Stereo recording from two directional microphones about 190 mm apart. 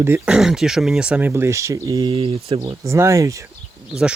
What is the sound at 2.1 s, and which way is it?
Speech, 30° right (ahead or behind).